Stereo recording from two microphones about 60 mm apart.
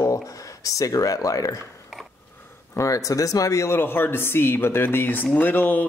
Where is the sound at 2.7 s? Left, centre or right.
Left.